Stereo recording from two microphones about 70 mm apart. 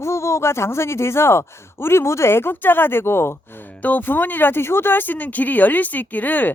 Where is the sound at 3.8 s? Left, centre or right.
Left.